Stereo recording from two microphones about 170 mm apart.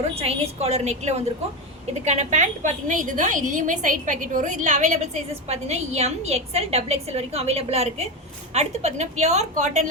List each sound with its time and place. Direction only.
0.2 s a woman's voice: 40° right (ahead or behind)